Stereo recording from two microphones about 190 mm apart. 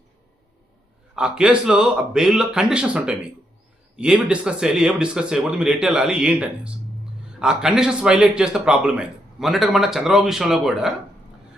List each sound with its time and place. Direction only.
1.1 s a man's voice: 5° right (ahead or behind)